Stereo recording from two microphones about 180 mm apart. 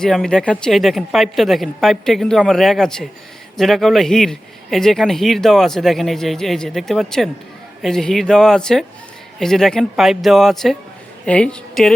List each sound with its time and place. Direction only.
0.0 s a woman's voice: 5° left (ahead or behind)